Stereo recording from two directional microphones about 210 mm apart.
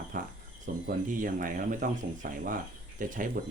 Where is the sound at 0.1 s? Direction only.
40° right (ahead or behind).